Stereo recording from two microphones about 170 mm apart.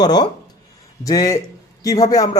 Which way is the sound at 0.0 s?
25° left (ahead or behind).